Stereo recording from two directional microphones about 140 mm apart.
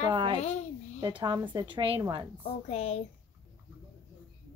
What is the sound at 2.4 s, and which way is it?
Speech, 45° left (ahead or behind).